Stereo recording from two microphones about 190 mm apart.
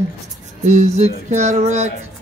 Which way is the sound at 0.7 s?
40° right (ahead or behind).